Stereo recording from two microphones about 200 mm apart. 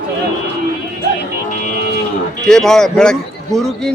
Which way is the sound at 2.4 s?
Centre (ahead or behind).